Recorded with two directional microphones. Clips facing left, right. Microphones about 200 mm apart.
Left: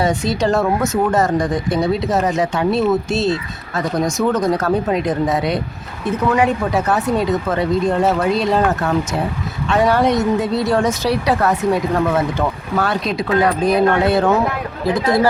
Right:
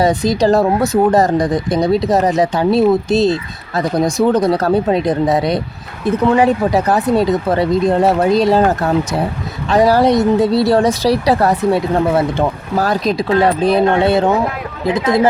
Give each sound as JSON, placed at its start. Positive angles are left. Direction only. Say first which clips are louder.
{"t": 0.0, "sound": "speech", "louder": "right 4 dB", "side_deg": -35}